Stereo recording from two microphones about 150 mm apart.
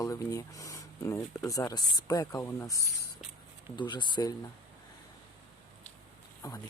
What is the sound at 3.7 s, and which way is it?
Speech, 30° left (ahead or behind).